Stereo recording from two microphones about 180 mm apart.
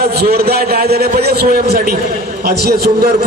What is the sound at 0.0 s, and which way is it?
A man's voice, 60° right (ahead or behind).